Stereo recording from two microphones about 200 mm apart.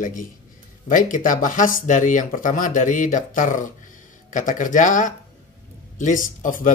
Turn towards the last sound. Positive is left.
turn(degrees=40)  # may be behind; listen again after turning